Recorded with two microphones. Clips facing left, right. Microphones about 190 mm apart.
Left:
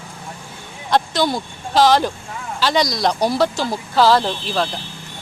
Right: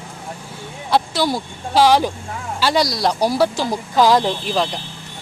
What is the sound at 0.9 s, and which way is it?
Speech, 10° right (ahead or behind).